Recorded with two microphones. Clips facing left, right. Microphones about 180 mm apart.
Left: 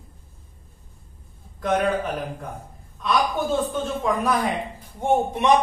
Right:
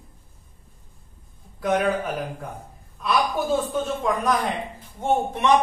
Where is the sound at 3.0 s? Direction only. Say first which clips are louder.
Even; 5° right (ahead or behind).